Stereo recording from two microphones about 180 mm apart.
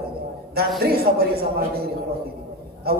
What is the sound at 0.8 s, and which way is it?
A man's voice, 60° right (ahead or behind).